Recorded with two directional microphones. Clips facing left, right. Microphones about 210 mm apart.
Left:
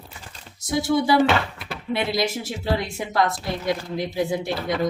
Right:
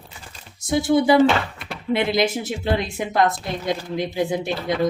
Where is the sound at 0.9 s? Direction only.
25° right (ahead or behind).